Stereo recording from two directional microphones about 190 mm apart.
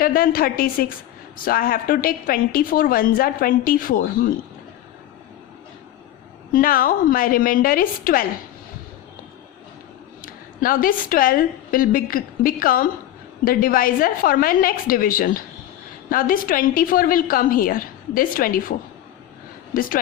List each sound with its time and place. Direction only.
0.0 s a woman's voice: 50° left (ahead or behind)
6.5 s a woman's voice: 45° left (ahead or behind)
10.2 s a woman's voice: 50° left (ahead or behind)
19.7 s a woman's voice: 50° left (ahead or behind)